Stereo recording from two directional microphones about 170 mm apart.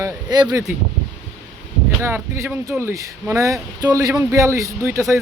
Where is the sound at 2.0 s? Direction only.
15° right (ahead or behind).